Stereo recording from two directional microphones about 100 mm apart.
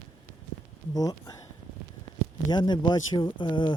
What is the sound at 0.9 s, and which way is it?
Speech, 40° left (ahead or behind).